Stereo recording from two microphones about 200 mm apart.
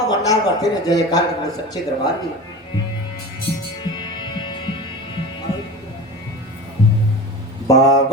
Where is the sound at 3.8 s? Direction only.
20° left (ahead or behind).